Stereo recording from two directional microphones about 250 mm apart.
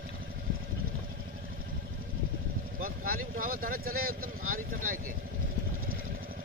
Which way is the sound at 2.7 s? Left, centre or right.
Right.